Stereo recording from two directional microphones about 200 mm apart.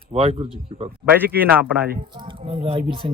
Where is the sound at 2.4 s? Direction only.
30° right (ahead or behind).